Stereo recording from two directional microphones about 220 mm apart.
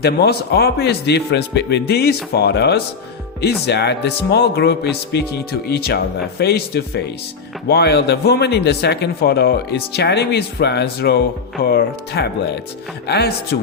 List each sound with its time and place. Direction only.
0.0 s speech: 45° left (ahead or behind)